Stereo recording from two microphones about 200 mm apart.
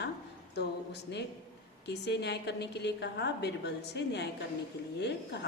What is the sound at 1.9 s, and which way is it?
A woman's voice, 60° left (ahead or behind).